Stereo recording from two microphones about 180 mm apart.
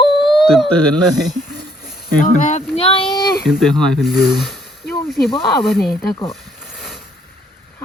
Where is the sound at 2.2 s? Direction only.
45° left (ahead or behind).